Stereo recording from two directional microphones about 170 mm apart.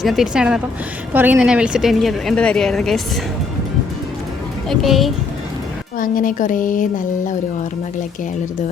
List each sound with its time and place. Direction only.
0.0 s a woman's voice: centre (ahead or behind)
4.7 s a woman's voice: centre (ahead or behind)
6.0 s a woman's voice: 55° left (ahead or behind)